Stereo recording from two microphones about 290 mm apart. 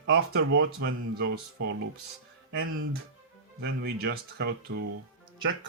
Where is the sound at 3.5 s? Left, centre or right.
Right.